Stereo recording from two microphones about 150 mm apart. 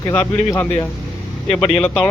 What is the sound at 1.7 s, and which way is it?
Speech, 5° left (ahead or behind).